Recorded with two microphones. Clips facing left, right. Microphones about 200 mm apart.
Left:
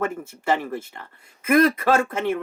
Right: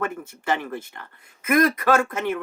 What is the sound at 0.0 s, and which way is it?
A woman's voice, 25° left (ahead or behind).